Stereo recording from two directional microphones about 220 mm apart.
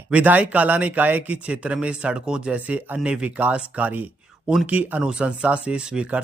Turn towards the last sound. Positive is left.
turn(degrees=-5)  # may be behind; listen again after turning